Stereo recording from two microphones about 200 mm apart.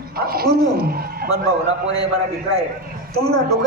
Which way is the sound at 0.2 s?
50° right (ahead or behind).